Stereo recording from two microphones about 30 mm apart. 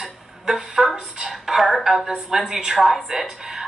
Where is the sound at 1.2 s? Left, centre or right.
Centre.